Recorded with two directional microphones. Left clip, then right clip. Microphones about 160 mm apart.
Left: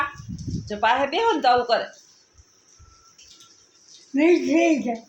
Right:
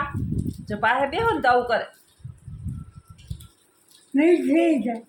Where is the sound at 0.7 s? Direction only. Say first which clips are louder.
Left 1 dB; 20° left (ahead or behind).